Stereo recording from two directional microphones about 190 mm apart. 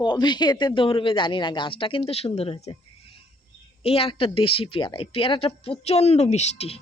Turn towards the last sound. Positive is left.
turn(degrees=35)  # may be behind; listen again after turning